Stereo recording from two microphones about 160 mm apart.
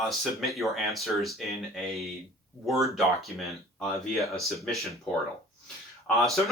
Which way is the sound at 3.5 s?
Centre (ahead or behind).